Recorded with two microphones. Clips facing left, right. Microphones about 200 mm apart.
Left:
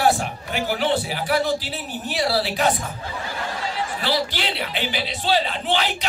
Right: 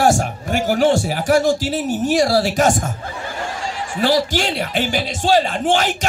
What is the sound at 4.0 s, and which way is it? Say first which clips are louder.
Speech: right 10 dB; 45° right (ahead or behind).